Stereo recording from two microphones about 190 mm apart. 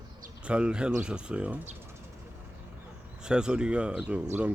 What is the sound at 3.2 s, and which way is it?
Speech, 5° right (ahead or behind).